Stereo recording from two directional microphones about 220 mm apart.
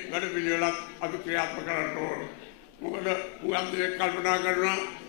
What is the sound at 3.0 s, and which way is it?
A man's voice, 15° left (ahead or behind).